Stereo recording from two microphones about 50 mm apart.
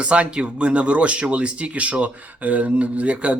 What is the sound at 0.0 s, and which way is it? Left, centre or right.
Speech, right.